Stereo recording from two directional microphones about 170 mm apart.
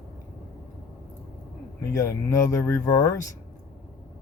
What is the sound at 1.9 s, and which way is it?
Speech, 15° left (ahead or behind).